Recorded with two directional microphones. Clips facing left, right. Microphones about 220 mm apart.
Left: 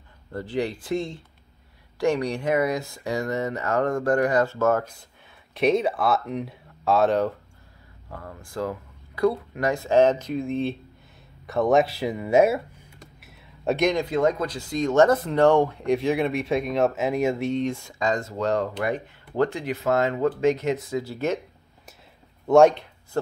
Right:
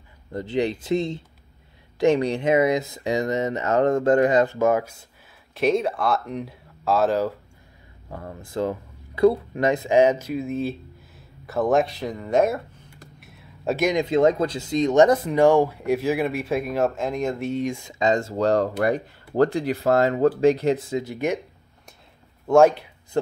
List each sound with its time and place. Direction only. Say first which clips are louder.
0.3 s speech: right 3 dB; 20° right (ahead or behind)
5.5 s speech: even; centre (ahead or behind)
8.1 s speech: right 4 dB; 25° right (ahead or behind); by 13.9 s 5° right (ahead or behind)
13.9 s speech: right 4 dB; 25° right (ahead or behind)
17.9 s speech: right 7 dB; 25° right (ahead or behind)
18.3 s speech: right 4 dB; 35° right (ahead or behind)
21.0 s speech: right 1 dB; 15° right (ahead or behind)
22.5 s speech: even; 5° right (ahead or behind)